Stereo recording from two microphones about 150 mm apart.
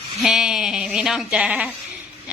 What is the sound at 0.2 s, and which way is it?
Speech, centre (ahead or behind).